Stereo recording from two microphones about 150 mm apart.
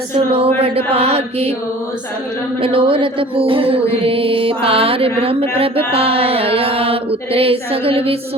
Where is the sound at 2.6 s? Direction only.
35° right (ahead or behind).